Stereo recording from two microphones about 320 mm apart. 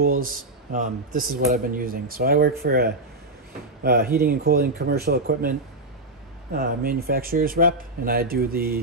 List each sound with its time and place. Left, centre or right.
0.0 s speech: right